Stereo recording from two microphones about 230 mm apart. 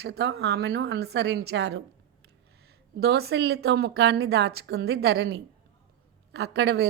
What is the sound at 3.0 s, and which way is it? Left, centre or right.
A woman's voice, right.